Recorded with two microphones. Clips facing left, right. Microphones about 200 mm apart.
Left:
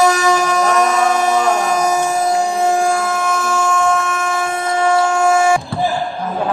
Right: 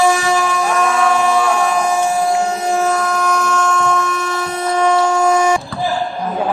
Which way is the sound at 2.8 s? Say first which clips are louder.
Even; 10° left (ahead or behind).